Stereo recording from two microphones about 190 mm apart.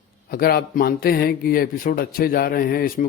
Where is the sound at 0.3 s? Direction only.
55° left (ahead or behind).